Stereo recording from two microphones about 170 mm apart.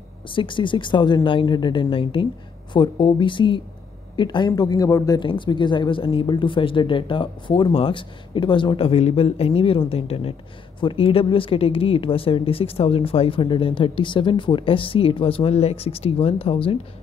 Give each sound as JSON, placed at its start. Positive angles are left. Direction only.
{"t": 0.3, "sound": "speech", "side_deg": 30}